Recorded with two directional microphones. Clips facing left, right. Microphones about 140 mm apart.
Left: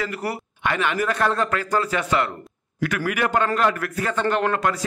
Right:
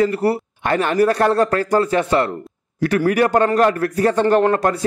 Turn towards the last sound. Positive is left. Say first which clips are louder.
# right 7 dB
turn(degrees=-35)  # may be behind; listen again after turning